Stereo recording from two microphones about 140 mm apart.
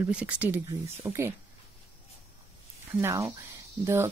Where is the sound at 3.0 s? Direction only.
20° right (ahead or behind).